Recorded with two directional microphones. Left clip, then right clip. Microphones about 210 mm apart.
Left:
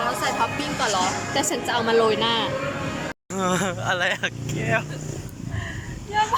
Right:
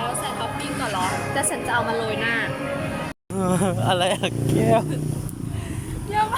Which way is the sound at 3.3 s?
10° right (ahead or behind).